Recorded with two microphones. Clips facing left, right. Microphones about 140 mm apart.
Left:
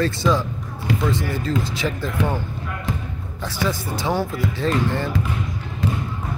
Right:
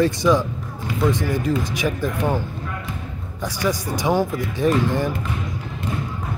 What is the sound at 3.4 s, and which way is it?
Speech, 15° right (ahead or behind).